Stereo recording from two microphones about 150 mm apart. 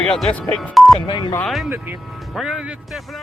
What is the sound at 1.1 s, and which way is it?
Speech, 30° left (ahead or behind).